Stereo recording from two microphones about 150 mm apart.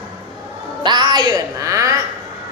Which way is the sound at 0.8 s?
30° right (ahead or behind).